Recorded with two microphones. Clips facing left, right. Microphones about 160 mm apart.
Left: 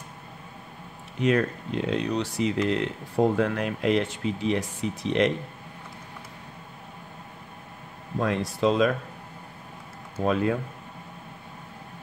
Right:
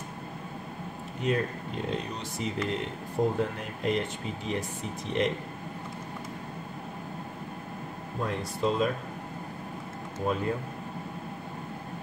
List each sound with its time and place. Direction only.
1.2 s speech: 85° left
8.2 s speech: 90° left
10.2 s speech: 85° left